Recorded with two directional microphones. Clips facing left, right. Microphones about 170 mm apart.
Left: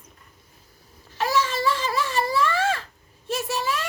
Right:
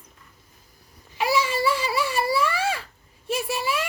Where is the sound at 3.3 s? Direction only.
10° right (ahead or behind).